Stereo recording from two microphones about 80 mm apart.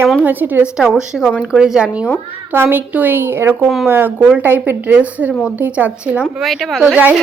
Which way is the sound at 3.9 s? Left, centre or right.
Right.